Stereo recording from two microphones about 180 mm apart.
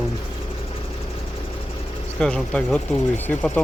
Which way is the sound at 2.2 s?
5° left (ahead or behind).